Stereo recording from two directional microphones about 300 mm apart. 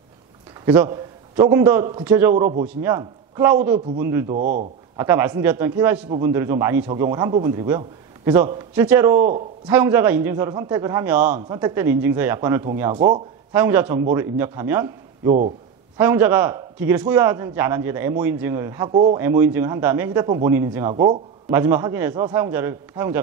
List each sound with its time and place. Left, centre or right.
0.7 s a man's voice: centre
4.4 s speech: right
4.9 s a man's voice: centre
13.6 s a man's voice: centre
15.2 s speech: right
16.0 s a man's voice: centre